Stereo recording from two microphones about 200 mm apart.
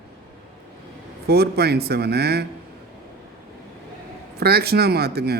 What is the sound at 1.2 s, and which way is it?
A man's voice, 50° right (ahead or behind).